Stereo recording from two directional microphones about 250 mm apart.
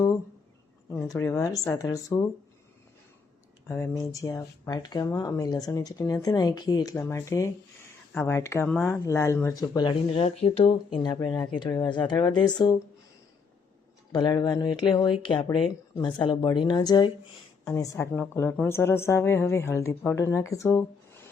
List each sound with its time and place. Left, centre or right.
0.9 s speech: centre
3.7 s speech: centre
14.1 s speech: centre